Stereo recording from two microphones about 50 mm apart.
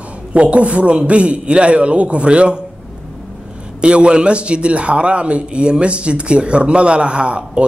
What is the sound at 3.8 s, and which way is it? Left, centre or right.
A man's voice, right.